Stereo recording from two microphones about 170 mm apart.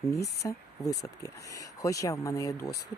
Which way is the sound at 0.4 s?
20° left (ahead or behind).